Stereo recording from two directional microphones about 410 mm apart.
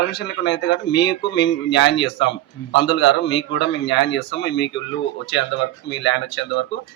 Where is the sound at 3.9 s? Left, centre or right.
Left.